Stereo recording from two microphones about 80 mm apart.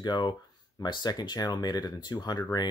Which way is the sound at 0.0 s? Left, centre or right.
Left.